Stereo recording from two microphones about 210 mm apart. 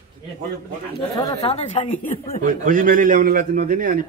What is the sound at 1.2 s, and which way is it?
Speech, 20° left (ahead or behind).